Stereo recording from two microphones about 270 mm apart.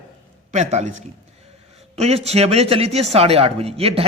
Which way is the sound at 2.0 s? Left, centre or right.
Right.